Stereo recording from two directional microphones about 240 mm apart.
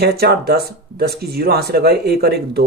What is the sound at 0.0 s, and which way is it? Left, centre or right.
Speech, right.